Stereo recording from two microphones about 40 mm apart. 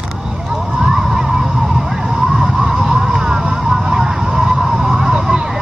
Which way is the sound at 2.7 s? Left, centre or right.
Centre.